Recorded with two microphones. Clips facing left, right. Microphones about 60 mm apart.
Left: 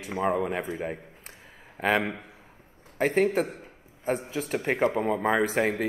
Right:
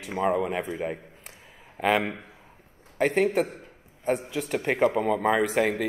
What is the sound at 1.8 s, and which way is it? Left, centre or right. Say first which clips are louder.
Speech: right 1 dB; centre.